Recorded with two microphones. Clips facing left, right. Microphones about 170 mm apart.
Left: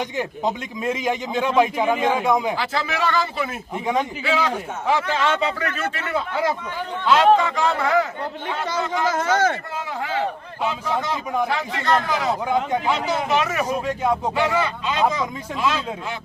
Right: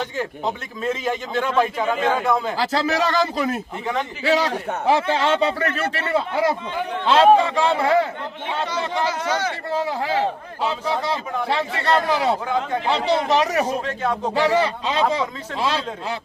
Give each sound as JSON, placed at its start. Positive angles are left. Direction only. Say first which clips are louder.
{"t": 0.0, "sound": "a man's voice", "louder": "left 1 dB", "side_deg": 15}
{"t": 2.6, "sound": "a man's voice", "louder": "right 4 dB", "side_deg": -40}
{"t": 9.0, "sound": "speech", "louder": "left 4 dB", "side_deg": 45}
{"t": 9.7, "sound": "a man's voice", "louder": "right 4 dB", "side_deg": -35}
{"t": 13.8, "sound": "a man's voice", "louder": "left 2 dB", "side_deg": 10}
{"t": 14.3, "sound": "a man's voice", "louder": "right 3 dB", "side_deg": -35}